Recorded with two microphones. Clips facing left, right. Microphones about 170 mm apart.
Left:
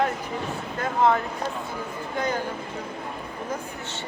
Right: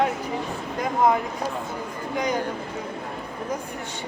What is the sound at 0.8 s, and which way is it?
Speech, 15° right (ahead or behind).